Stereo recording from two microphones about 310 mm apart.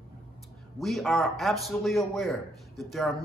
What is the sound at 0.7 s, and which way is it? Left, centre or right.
A man's voice, centre.